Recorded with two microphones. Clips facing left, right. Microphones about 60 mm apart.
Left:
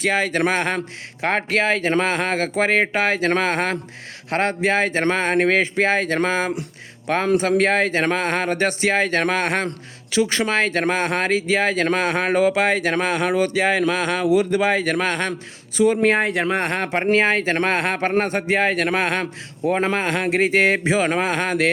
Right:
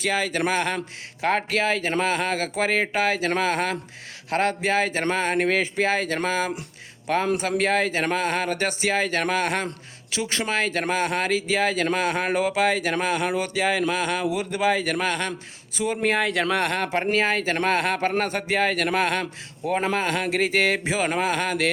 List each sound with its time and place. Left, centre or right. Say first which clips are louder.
0.0 s speech: left 4 dB; left
10.1 s speech: left 7 dB; left
10.5 s speech: left 4 dB; left
16.2 s speech: left 2 dB; left